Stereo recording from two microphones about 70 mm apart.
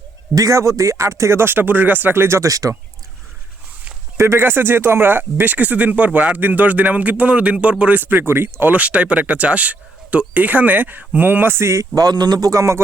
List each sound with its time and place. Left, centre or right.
0.3 s speech: right
4.2 s speech: right
8.7 s speech: centre; by 11.9 s right
11.9 s speech: right